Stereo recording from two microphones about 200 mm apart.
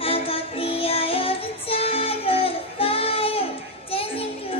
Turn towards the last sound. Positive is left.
turn(degrees=30)  # may be behind; listen again after turning